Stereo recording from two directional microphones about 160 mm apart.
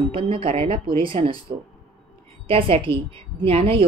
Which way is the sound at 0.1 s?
35° right (ahead or behind).